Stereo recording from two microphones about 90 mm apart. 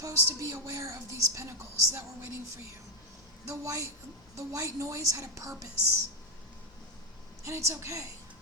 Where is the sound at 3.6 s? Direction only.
35° right (ahead or behind).